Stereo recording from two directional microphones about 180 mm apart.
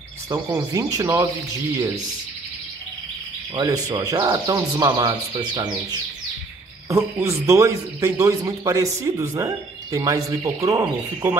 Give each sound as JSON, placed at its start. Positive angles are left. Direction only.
{"t": 0.3, "sound": "a man's voice", "side_deg": -15}
{"t": 3.5, "sound": "a man's voice", "side_deg": -20}